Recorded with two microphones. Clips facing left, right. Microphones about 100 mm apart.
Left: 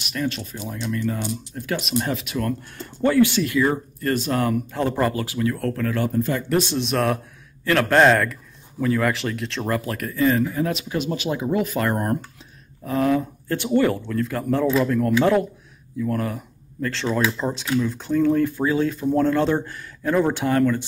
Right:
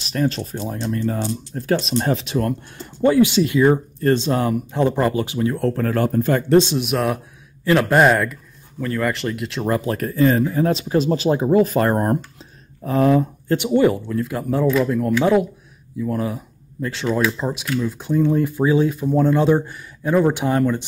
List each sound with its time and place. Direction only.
0.0 s speech: 35° right (ahead or behind)
3.0 s speech: 15° right (ahead or behind); by 6.4 s 50° right (ahead or behind)
6.5 s speech: 20° right (ahead or behind)
6.9 s speech: 5° right (ahead or behind)
9.7 s speech: 25° right (ahead or behind)
13.7 s speech: 15° right (ahead or behind)
16.0 s speech: 15° right (ahead or behind)